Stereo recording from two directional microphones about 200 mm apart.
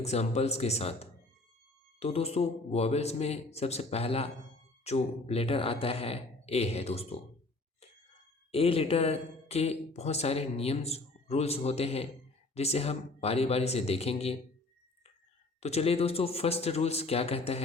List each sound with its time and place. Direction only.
0.0 s speech: 35° left (ahead or behind)
8.5 s speech: 30° left (ahead or behind)
15.6 s speech: 30° left (ahead or behind)